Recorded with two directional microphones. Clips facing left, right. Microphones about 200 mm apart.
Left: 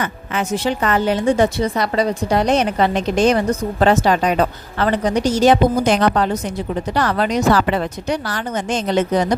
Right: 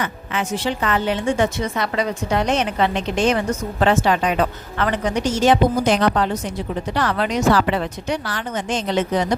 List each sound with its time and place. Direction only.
0.0 s a woman's voice: 45° left (ahead or behind)
5.8 s a woman's voice: 50° left (ahead or behind)